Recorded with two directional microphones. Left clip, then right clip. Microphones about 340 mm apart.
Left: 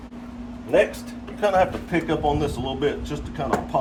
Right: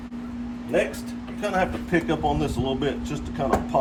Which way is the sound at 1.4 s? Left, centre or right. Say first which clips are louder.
Left 5 dB; centre.